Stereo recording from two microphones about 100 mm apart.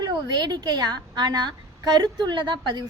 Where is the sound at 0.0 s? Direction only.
45° right (ahead or behind).